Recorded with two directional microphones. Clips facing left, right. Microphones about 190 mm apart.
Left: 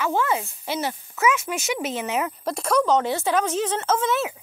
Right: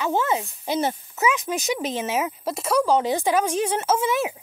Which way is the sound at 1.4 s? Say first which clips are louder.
Right 2 dB; 40° right (ahead or behind).